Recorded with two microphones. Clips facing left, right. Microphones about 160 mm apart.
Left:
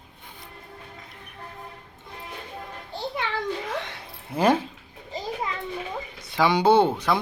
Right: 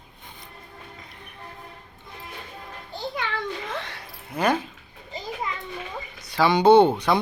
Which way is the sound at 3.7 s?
20° left (ahead or behind).